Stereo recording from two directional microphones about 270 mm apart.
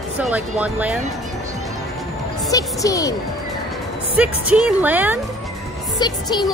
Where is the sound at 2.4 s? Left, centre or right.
Centre.